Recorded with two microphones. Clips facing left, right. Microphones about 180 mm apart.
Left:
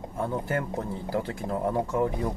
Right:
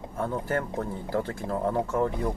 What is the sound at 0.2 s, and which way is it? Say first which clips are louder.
Speech: even; 15° left (ahead or behind).